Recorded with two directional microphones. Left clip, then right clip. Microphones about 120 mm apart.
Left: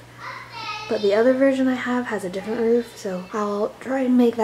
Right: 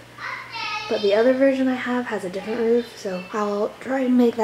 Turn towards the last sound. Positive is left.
turn(degrees=5)  # may be behind; listen again after turning